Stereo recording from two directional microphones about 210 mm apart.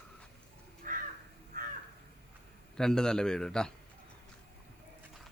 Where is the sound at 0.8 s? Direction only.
40° right (ahead or behind).